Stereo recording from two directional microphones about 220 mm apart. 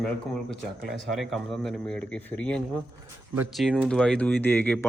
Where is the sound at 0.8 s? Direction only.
Centre (ahead or behind).